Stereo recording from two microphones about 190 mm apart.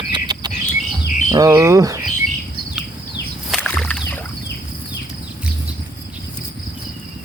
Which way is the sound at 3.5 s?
5° left (ahead or behind).